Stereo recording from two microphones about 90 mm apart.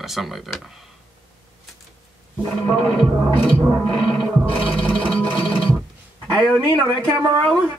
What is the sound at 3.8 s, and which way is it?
Speech, 5° left (ahead or behind).